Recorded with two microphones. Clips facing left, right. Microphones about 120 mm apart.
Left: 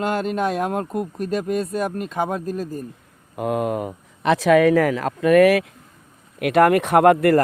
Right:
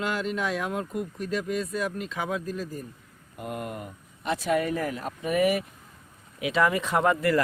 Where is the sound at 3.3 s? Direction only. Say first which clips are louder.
Left 12 dB; 90° left.